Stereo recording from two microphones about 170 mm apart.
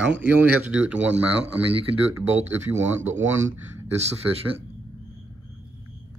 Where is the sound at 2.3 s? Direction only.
10° right (ahead or behind).